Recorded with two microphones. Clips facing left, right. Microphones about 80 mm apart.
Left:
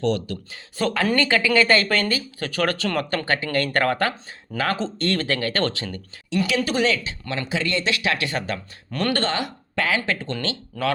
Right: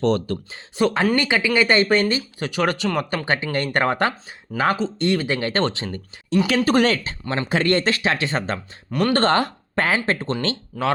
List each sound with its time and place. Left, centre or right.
0.0 s speech: right
1.1 s speech: centre
3.2 s speech: right
6.7 s speech: right
8.9 s speech: centre
9.1 s speech: right
10.7 s speech: centre